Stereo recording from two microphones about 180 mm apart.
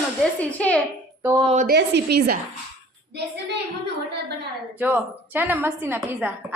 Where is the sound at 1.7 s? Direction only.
65° right (ahead or behind).